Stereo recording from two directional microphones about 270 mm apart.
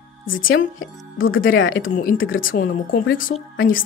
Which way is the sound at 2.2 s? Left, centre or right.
Left.